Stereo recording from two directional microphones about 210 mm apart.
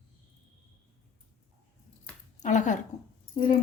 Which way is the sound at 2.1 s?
5° left (ahead or behind).